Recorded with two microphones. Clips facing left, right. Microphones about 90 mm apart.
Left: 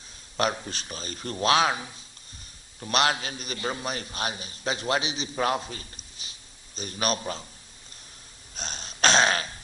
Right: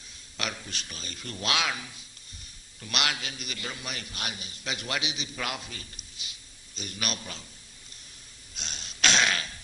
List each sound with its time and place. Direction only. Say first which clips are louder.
0.3 s a man's voice: left 9 dB; 35° left (ahead or behind)
8.5 s throat clearing: left 5 dB; 40° left (ahead or behind)